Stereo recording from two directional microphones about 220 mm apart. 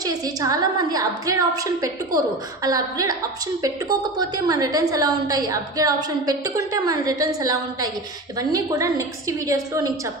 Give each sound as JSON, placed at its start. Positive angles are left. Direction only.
{"t": 0.0, "sound": "a woman's voice", "side_deg": -15}